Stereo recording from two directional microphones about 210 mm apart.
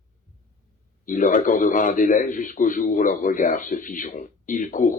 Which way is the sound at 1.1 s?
40° left (ahead or behind).